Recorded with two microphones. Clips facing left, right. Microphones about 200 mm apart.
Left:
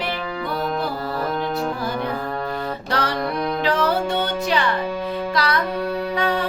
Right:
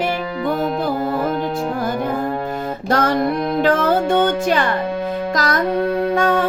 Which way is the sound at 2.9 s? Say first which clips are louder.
Right 8 dB; 45° right (ahead or behind).